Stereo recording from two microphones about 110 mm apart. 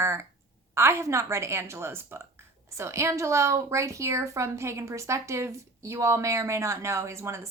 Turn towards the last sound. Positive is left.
turn(degrees=-25)  # may be behind; listen again after turning